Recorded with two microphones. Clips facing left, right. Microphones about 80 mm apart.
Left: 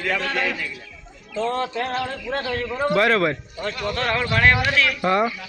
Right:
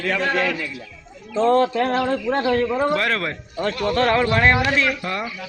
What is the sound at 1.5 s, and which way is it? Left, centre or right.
A man's voice, right.